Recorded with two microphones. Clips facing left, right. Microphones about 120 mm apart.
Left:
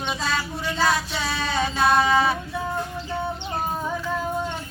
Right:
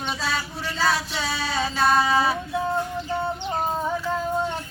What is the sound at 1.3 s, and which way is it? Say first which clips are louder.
Music: left 1 dB; 5° right (ahead or behind).